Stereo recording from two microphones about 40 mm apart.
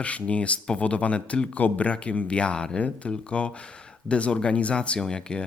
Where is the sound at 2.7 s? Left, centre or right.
Left.